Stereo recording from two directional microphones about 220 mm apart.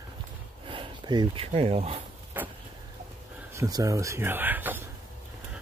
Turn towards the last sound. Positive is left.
turn(degrees=-10)  # may be behind; listen again after turning